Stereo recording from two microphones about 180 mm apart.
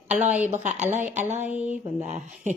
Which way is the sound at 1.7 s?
45° right (ahead or behind).